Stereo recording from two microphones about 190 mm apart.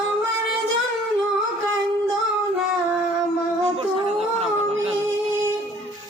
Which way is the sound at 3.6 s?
30° right (ahead or behind).